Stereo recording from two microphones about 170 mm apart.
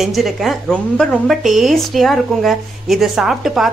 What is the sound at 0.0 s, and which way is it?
A woman's voice, centre (ahead or behind).